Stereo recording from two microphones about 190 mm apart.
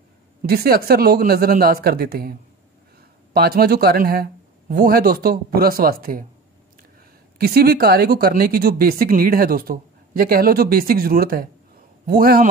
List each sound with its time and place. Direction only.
0.4 s speech: 55° right (ahead or behind)
3.3 s speech: 55° right (ahead or behind)
7.3 s speech: 55° right (ahead or behind)